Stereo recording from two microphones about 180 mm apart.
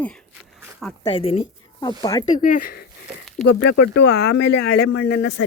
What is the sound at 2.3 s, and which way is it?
Speech, 50° left (ahead or behind).